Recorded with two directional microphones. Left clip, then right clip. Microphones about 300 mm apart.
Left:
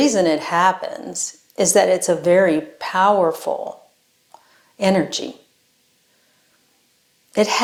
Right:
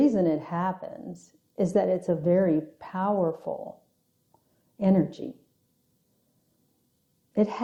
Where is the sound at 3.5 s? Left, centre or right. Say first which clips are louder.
Left 10 dB; left.